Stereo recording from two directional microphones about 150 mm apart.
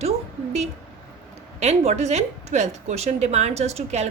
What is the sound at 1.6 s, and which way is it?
A woman's voice, 45° right (ahead or behind).